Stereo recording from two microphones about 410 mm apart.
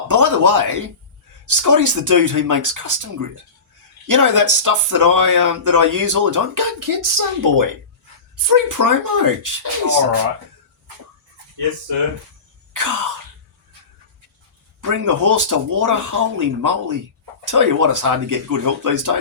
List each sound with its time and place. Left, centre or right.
0.1 s speech: right
12.7 s throat clearing: right
14.8 s speech: right